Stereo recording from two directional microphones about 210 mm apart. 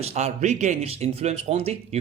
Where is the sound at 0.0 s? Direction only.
30° right (ahead or behind).